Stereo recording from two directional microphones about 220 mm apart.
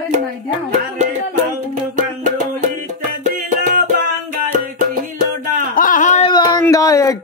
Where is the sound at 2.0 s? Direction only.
35° right (ahead or behind).